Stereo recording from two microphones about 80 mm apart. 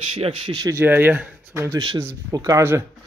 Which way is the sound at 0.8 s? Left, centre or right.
Right.